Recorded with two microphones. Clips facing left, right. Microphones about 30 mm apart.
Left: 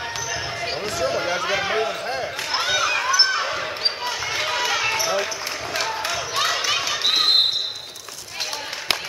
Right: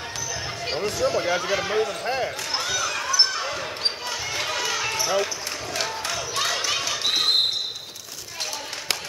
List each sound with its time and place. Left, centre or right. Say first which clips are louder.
0.7 s speech: right 1 dB; centre
2.0 s basketball bounce: right 1 dB; centre
2.5 s basketball bounce: left 9 dB; left